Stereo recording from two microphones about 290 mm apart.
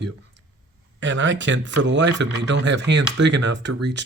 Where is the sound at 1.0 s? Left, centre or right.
Right.